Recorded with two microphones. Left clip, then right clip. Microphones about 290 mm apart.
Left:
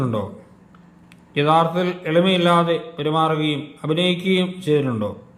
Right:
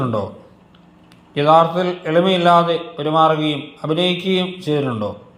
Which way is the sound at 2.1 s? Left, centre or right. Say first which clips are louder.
Right 3 dB; centre.